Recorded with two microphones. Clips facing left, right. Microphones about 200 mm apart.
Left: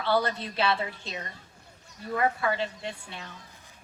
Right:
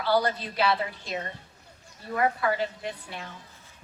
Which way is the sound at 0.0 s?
25° left (ahead or behind).